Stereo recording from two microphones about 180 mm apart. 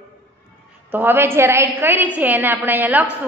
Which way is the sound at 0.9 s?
10° right (ahead or behind).